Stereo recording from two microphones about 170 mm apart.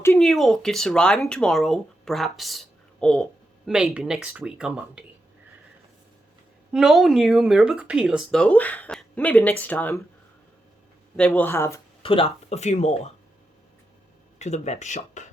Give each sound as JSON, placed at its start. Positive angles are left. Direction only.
{"t": 0.0, "sound": "a sound", "side_deg": 15}
{"t": 0.3, "sound": "speech", "side_deg": 0}
{"t": 6.7, "sound": "speech", "side_deg": -5}
{"t": 11.2, "sound": "speech", "side_deg": 10}
{"t": 12.0, "sound": "speech", "side_deg": 35}
{"t": 14.3, "sound": "speech", "side_deg": 40}